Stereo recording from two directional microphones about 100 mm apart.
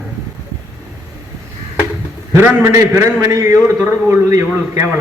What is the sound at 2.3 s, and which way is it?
A man's voice, 25° right (ahead or behind).